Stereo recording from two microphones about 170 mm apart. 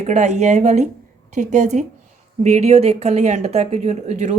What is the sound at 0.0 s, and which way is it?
A woman's voice, 45° right (ahead or behind).